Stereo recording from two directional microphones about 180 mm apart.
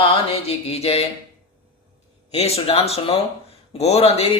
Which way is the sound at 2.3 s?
35° left (ahead or behind).